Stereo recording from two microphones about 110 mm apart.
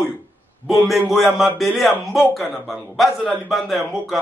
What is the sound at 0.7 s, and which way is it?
A man's voice, centre (ahead or behind).